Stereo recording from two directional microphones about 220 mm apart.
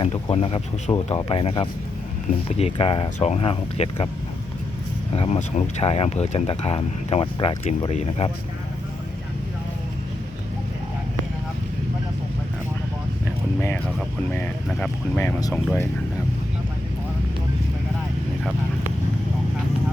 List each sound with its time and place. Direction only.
0.0 s speech: 25° left (ahead or behind)
5.1 s speech: 30° left (ahead or behind)
14.3 s speech: 5° left (ahead or behind)